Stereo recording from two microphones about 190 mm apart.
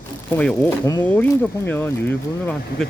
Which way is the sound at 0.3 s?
5° left (ahead or behind).